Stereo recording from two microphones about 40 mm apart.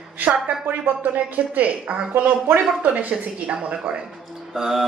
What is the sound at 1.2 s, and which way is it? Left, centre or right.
Speech, right.